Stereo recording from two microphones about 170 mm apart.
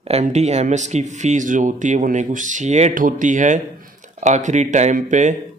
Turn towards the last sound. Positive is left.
turn(degrees=-45)  # may be behind; listen again after turning